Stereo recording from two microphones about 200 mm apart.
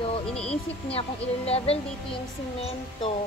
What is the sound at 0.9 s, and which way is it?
Speech, 30° left (ahead or behind).